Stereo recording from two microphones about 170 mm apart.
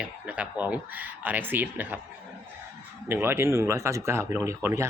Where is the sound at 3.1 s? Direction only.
15° right (ahead or behind).